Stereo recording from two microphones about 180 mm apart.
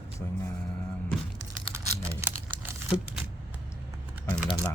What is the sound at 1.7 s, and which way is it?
Computer keyboard, 15° right (ahead or behind).